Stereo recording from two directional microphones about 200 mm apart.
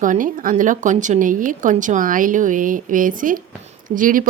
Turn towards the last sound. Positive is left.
turn(degrees=-45)  # may be behind; listen again after turning